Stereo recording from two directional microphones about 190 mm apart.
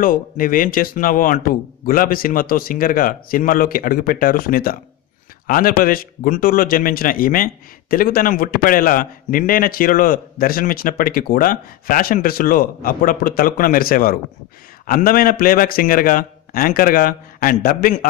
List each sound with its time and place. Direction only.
0.0 s a man's voice: 45° left (ahead or behind)